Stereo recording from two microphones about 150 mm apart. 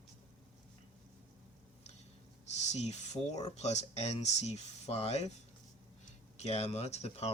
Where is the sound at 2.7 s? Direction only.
50° left (ahead or behind).